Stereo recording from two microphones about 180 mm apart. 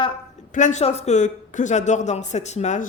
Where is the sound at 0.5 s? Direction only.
40° left (ahead or behind).